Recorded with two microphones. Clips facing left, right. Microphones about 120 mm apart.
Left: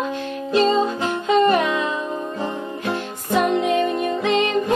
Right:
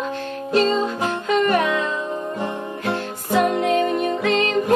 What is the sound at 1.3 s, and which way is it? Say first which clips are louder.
Music: left 2 dB; 20° left (ahead or behind).